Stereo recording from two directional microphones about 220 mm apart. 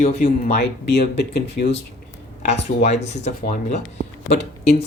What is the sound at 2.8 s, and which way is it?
Speech, 30° left (ahead or behind).